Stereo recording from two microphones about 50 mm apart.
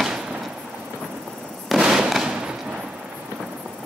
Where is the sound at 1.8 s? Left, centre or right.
Centre.